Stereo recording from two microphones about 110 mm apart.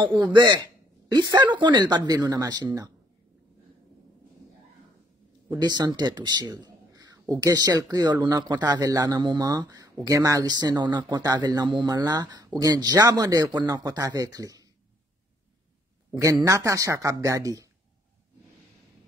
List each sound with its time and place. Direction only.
0.0 s speech: 45° right (ahead or behind)
5.5 s speech: 40° right (ahead or behind)
16.2 s speech: 35° right (ahead or behind)